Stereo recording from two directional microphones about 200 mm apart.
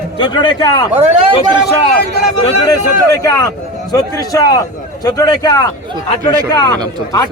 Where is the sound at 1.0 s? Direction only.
30° right (ahead or behind).